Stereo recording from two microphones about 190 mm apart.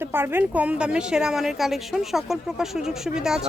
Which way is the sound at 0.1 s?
10° right (ahead or behind).